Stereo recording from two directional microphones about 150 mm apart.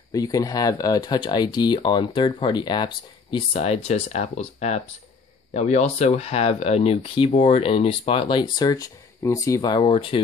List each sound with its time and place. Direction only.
0.1 s speech: 25° left (ahead or behind)